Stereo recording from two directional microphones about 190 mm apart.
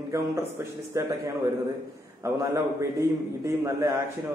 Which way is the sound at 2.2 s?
15° right (ahead or behind).